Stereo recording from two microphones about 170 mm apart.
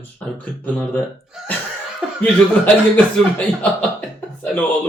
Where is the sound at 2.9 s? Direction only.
10° left (ahead or behind).